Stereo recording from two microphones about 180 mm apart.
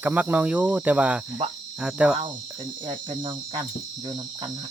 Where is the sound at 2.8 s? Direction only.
25° right (ahead or behind).